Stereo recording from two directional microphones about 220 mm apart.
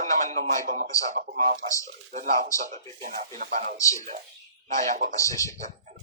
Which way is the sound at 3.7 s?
15° left (ahead or behind).